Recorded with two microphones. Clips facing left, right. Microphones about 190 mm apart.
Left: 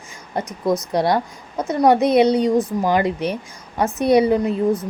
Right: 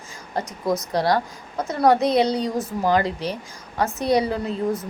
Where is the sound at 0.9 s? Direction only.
25° left (ahead or behind).